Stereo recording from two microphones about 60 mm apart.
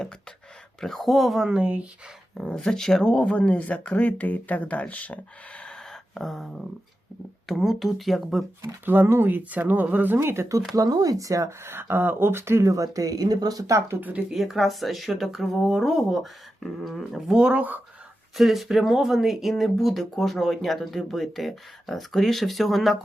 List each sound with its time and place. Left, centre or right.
0.8 s speech: centre
2.6 s speech: centre
5.9 s a sound: centre
7.4 s speech: centre
8.6 s speech: right
9.4 s speech: right
10.2 s speech: right
10.8 s speech: right
11.6 s speech: right
12.6 s speech: right
13.9 s speech: right
14.3 s speech: centre
17.3 s speech: right
18.3 s speech: centre